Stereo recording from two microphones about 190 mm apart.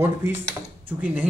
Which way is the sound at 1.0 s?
10° right (ahead or behind).